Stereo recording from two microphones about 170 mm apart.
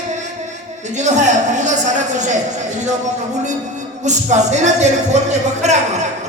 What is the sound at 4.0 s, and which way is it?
Speech, 45° right (ahead or behind).